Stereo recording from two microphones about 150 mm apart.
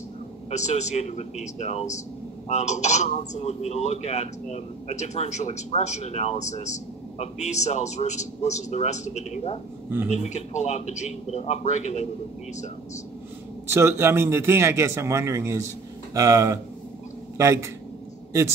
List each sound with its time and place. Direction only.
0.5 s a man's voice: 50° left (ahead or behind)
13.7 s a man's voice: 15° right (ahead or behind)